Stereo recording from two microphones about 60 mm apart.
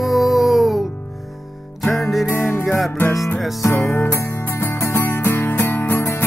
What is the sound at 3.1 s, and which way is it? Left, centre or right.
Music, left.